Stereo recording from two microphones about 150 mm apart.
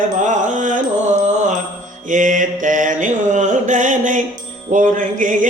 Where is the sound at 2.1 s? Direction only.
60° right (ahead or behind).